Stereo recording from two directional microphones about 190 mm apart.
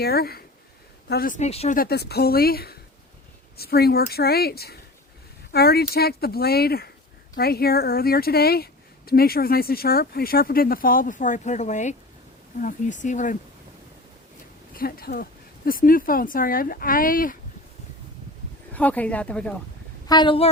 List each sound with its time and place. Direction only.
0.0 s speech: 55° left (ahead or behind); by 1.7 s 35° left (ahead or behind)
1.7 s a woman's voice: 55° left (ahead or behind)
14.8 s a woman's voice: 50° left (ahead or behind)
18.7 s a woman's voice: 10° left (ahead or behind)
20.1 s speech: 25° left (ahead or behind)